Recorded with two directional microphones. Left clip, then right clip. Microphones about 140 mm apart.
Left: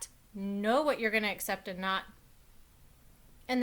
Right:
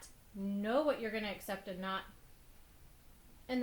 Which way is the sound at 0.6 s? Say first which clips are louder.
Left 5 dB; 35° left (ahead or behind).